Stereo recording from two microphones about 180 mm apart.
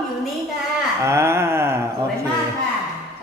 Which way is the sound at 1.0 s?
15° right (ahead or behind).